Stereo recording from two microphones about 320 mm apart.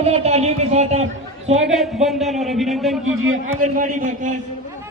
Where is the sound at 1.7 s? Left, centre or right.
Centre.